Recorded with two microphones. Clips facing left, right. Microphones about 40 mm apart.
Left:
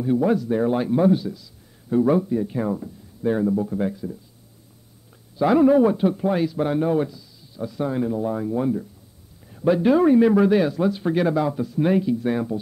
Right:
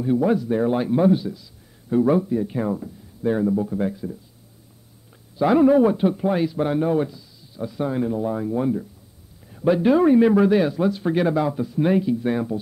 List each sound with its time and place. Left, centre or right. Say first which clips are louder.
0.0 s a man's voice: even; centre
3.9 s a man's voice: even; centre
5.4 s a man's voice: even; centre
7.1 s a man's voice: even; centre